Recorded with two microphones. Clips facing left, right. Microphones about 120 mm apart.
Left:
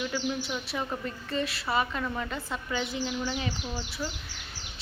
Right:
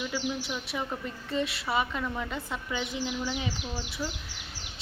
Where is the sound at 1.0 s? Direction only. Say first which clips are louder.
Even; 15° right (ahead or behind).